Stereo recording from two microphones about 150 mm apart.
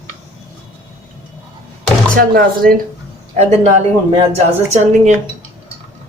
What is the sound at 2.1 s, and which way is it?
Speech, 75° right (ahead or behind).